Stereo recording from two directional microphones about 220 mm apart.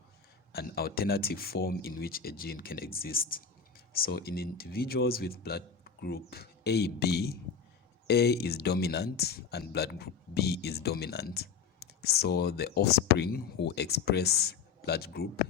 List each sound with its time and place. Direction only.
0.5 s speech: 45° left (ahead or behind)